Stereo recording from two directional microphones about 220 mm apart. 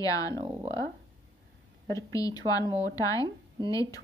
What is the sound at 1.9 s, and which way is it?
Speech, 15° left (ahead or behind).